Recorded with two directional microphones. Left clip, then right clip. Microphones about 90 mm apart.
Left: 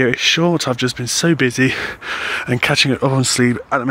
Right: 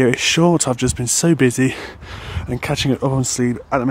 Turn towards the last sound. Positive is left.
turn(degrees=-20)  # may be behind; listen again after turning